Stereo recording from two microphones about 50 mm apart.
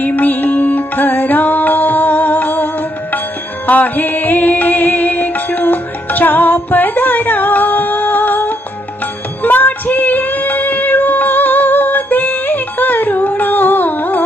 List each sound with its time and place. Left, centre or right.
0.0 s music: left
3.7 s music: left
9.4 s female singing: left